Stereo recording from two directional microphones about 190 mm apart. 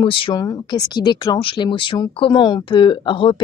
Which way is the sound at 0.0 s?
25° left (ahead or behind).